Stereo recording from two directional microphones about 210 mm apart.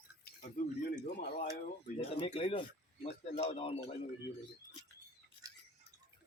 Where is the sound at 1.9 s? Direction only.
25° left (ahead or behind).